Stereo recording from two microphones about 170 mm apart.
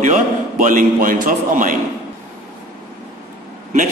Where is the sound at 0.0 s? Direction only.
50° right (ahead or behind).